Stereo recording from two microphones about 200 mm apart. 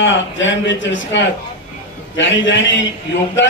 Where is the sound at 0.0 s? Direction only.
65° left (ahead or behind).